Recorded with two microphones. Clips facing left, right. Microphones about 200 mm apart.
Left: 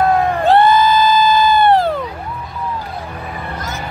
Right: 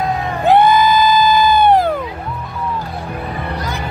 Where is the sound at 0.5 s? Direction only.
15° right (ahead or behind).